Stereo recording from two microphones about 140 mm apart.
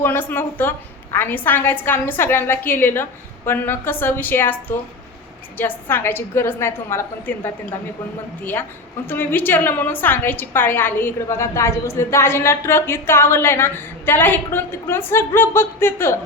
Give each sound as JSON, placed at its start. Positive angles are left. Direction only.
{"t": 0.0, "sound": "a woman's voice", "side_deg": 15}
{"t": 9.0, "sound": "a woman's voice", "side_deg": 15}